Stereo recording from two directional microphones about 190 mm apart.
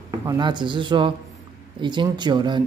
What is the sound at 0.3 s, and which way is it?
Speech, 25° right (ahead or behind).